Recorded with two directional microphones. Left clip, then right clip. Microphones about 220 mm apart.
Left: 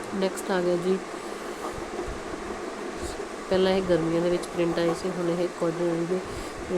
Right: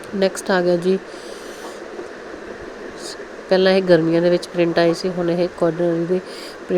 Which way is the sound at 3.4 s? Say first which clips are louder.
Right 9 dB; 30° right (ahead or behind).